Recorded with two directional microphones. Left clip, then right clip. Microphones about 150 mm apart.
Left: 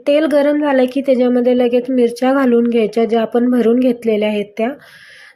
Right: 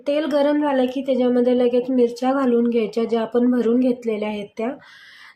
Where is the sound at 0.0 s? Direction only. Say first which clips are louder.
Left 7 dB; 25° left (ahead or behind).